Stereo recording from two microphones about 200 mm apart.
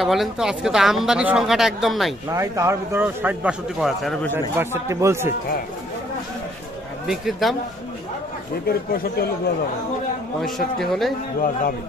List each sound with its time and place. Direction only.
0.0 s speech: centre (ahead or behind)
2.3 s a man's voice: 15° right (ahead or behind); by 4.3 s centre (ahead or behind)
4.3 s a man's voice: 10° right (ahead or behind)
7.1 s speech: centre (ahead or behind)
8.6 s speech: 50° left (ahead or behind)
10.4 s speech: centre (ahead or behind)